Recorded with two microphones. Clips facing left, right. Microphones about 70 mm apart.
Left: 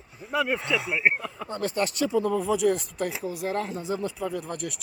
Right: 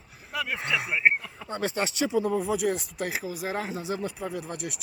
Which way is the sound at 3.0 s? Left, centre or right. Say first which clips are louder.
Even; right.